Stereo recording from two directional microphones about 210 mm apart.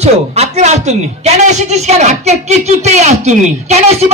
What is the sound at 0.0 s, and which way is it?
A woman's voice, 30° right (ahead or behind).